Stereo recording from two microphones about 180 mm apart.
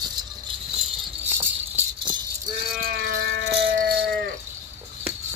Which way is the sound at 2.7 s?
55° right (ahead or behind).